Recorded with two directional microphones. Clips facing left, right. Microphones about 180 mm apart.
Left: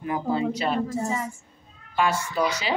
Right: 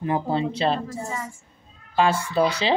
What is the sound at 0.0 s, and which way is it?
Speech, 30° right (ahead or behind).